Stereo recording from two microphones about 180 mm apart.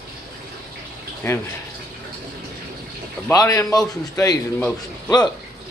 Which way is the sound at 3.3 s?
20° left (ahead or behind).